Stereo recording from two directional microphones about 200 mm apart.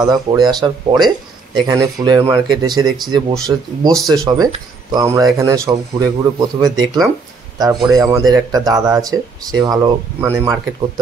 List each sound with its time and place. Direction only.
0.0 s a man's voice: 20° right (ahead or behind)